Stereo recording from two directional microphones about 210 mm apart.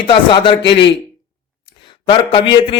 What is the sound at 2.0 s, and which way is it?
Speech, 25° left (ahead or behind).